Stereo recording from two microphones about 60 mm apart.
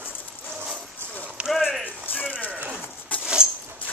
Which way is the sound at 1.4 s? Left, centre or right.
Centre.